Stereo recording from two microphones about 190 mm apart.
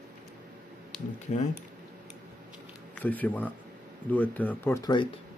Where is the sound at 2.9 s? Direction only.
10° left (ahead or behind).